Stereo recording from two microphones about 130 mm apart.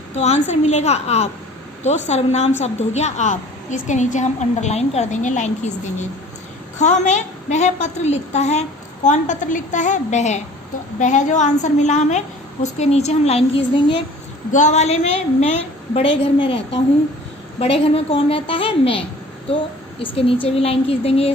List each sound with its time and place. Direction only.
0.2 s a woman's voice: 60° left (ahead or behind)
9.0 s a woman's voice: 70° left (ahead or behind)
14.5 s a woman's voice: 65° left (ahead or behind); by 21.3 s 50° left (ahead or behind)